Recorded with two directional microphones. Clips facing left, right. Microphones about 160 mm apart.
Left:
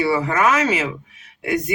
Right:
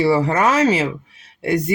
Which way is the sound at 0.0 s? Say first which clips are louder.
Right 2 dB; 35° right (ahead or behind).